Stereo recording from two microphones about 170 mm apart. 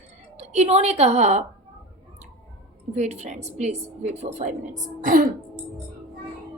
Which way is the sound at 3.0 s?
40° right (ahead or behind).